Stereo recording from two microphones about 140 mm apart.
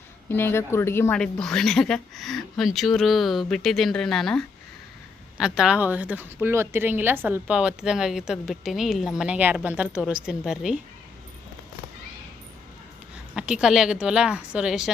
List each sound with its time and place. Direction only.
0.3 s speech: 15° left (ahead or behind)
1.1 s a woman's voice: 5° left (ahead or behind)
13.3 s speech: 5° right (ahead or behind)